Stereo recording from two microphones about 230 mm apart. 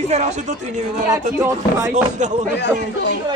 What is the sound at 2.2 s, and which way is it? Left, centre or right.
Speech, right.